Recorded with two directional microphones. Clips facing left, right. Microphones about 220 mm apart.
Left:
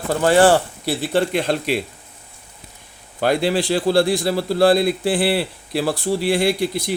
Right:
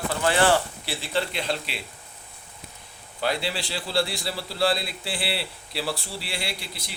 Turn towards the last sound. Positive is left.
turn(degrees=50)  # may be behind; listen again after turning